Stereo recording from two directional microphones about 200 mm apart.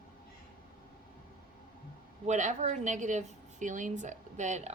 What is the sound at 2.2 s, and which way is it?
A woman's voice, 35° right (ahead or behind).